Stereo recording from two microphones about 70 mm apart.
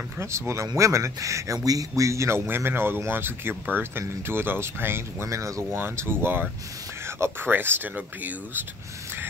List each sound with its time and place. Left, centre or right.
0.2 s speech: right
5.2 s speech: right
5.7 s speech: right